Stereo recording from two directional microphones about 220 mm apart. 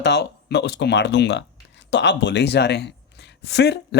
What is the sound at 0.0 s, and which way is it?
Speech, 50° left (ahead or behind).